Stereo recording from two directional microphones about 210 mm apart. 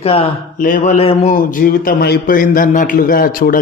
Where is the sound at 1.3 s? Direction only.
40° left (ahead or behind).